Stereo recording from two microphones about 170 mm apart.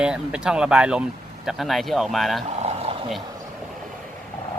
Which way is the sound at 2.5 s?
40° right (ahead or behind).